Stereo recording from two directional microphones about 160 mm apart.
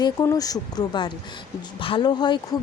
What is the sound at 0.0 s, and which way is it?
Speech, 25° left (ahead or behind).